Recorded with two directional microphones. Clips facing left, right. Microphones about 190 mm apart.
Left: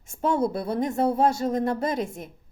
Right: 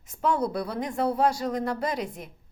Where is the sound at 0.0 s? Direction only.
25° left (ahead or behind).